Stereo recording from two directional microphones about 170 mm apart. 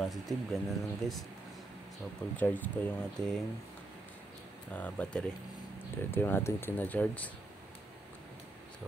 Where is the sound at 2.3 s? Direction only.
10° left (ahead or behind).